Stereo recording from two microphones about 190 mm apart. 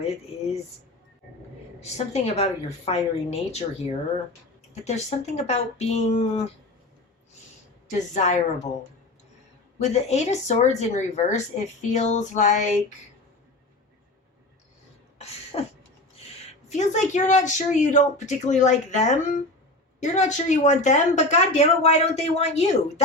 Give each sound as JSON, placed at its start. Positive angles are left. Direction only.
{"t": 1.8, "sound": "speech", "side_deg": 35}
{"t": 7.9, "sound": "speech", "side_deg": 40}
{"t": 9.7, "sound": "speech", "side_deg": 35}
{"t": 15.5, "sound": "a sound", "side_deg": 30}
{"t": 16.6, "sound": "speech", "side_deg": 35}